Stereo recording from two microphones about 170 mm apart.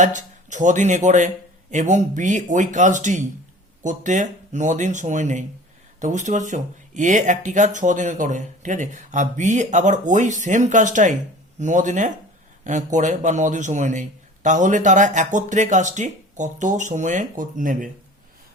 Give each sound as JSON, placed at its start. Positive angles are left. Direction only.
{"t": 0.0, "sound": "speech", "side_deg": -45}